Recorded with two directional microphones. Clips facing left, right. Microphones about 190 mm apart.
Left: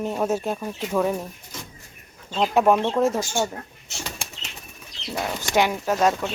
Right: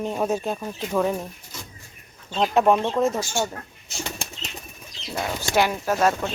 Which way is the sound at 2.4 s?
10° left (ahead or behind).